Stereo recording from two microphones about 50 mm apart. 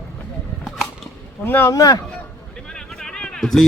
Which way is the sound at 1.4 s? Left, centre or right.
Left.